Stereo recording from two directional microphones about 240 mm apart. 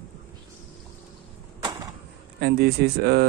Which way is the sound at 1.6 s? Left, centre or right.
Centre.